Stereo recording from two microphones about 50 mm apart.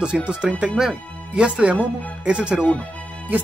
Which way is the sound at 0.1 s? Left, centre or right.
Centre.